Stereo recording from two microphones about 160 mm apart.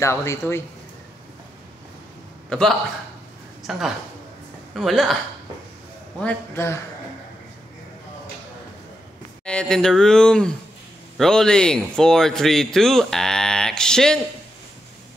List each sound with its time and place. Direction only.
0.0 s speech: 15° left (ahead or behind)
2.5 s speech: 5° left (ahead or behind)
3.7 s speech: centre (ahead or behind)
6.1 s speech: 10° left (ahead or behind)
9.4 s speech: 5° left (ahead or behind)